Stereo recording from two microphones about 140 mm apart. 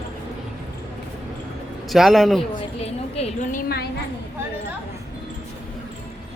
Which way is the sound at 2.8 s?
45° left (ahead or behind).